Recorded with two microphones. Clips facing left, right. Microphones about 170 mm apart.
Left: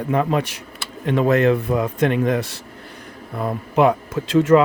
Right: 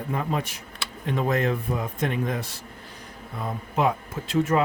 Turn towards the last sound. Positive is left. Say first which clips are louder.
# left 9 dB
turn(degrees=90)